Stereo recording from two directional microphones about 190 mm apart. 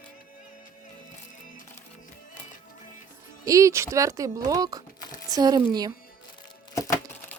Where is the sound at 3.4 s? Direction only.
15° right (ahead or behind).